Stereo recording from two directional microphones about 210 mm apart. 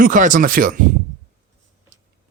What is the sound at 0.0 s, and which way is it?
Speech, 40° right (ahead or behind).